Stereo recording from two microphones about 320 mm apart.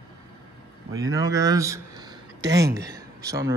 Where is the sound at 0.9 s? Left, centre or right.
Centre.